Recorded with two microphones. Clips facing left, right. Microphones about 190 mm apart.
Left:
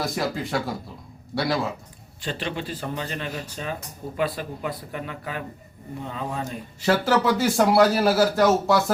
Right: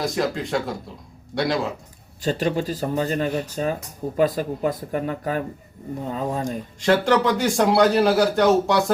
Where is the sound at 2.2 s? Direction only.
40° right (ahead or behind).